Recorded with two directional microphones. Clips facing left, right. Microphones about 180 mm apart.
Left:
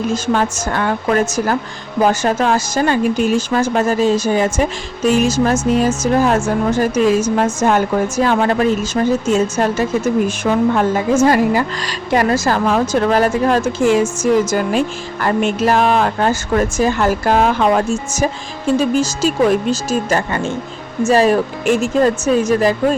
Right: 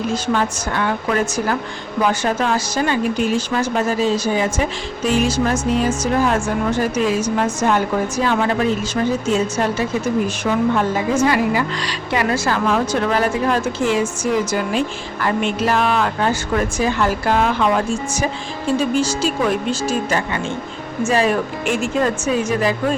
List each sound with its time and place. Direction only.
0.1 s a woman's voice: 45° left (ahead or behind)